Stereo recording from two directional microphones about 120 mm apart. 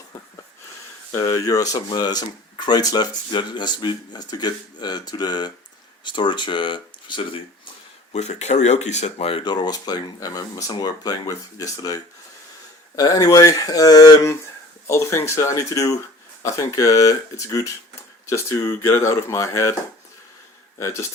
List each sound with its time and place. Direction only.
1.1 s speech: 25° left (ahead or behind); by 6.7 s 45° left (ahead or behind)
8.1 s speech: 70° left (ahead or behind)
9.4 s speech: 35° left (ahead or behind)
18.3 s speech: 25° left (ahead or behind)
20.7 s speech: 25° left (ahead or behind)